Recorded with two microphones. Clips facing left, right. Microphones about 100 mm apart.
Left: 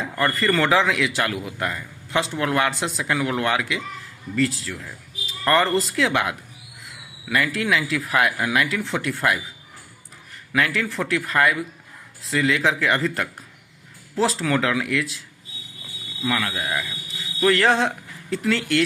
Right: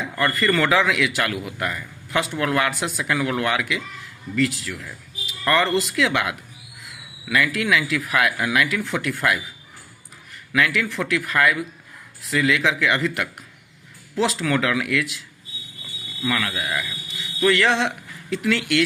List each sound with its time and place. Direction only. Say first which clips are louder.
0.3 s a man's voice: even; 30° left (ahead or behind)
10.5 s speech: right 1 dB; 35° left (ahead or behind)
16.2 s a man's voice: even; 25° left (ahead or behind)
17.4 s speech: left 1 dB; 40° left (ahead or behind)